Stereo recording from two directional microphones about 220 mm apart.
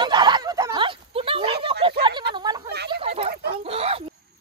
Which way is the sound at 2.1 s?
45° right (ahead or behind).